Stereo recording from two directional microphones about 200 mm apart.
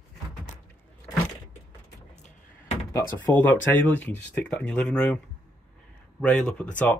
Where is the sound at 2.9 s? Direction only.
15° left (ahead or behind).